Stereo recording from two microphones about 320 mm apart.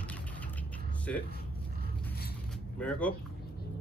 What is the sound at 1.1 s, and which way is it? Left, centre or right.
Speech, centre.